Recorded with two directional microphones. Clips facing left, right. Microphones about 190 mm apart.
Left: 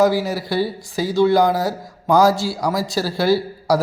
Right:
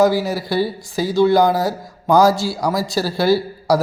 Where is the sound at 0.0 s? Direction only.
40° right (ahead or behind).